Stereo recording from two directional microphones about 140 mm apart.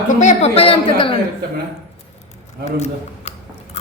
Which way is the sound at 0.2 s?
50° left (ahead or behind).